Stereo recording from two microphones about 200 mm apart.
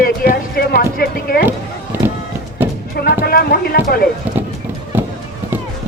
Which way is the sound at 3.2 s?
50° left (ahead or behind).